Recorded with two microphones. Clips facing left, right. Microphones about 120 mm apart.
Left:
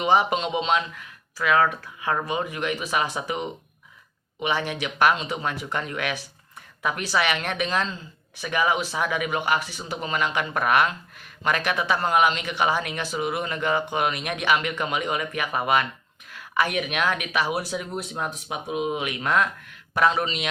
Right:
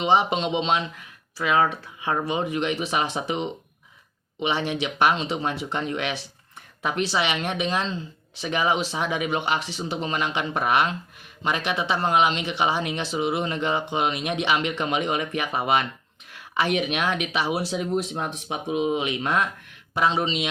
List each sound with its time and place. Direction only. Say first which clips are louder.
0.0 s speech: even; 25° right (ahead or behind)